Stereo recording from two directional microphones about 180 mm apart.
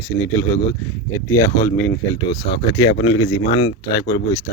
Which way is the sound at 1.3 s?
15° left (ahead or behind).